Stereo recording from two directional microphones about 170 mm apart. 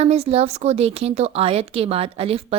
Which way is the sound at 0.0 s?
40° right (ahead or behind).